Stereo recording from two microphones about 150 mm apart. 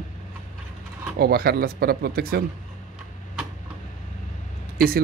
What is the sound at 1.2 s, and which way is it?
Speech, 90° right.